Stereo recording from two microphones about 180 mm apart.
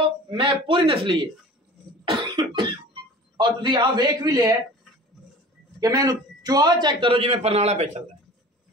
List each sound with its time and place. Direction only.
0.3 s a man's voice: 30° right (ahead or behind)
2.0 s cough: 30° right (ahead or behind)
3.3 s a man's voice: 25° right (ahead or behind)
5.8 s a man's voice: 20° right (ahead or behind); by 8.0 s 40° right (ahead or behind)